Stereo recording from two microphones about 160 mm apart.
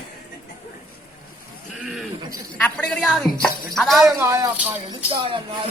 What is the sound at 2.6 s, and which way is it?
A woman's voice, 10° left (ahead or behind).